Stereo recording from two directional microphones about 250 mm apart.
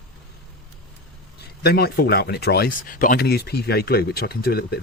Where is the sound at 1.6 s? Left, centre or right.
Left.